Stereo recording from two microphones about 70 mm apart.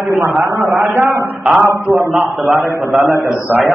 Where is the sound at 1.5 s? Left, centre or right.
Centre.